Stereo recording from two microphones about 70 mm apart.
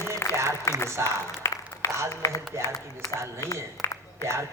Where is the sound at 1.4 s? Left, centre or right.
Left.